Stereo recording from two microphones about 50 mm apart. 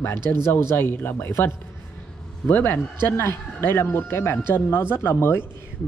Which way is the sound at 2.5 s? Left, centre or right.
Left.